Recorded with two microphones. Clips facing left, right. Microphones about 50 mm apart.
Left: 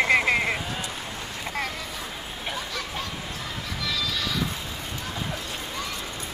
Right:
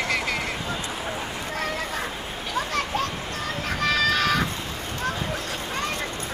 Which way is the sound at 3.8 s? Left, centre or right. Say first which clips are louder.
Right 8 dB; right.